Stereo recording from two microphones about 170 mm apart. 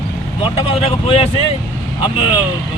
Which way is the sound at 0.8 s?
35° left (ahead or behind).